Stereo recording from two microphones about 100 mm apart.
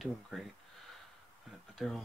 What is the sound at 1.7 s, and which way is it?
Speech, centre (ahead or behind).